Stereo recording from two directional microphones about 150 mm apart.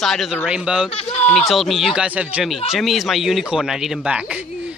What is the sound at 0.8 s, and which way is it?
Speech, 40° left (ahead or behind).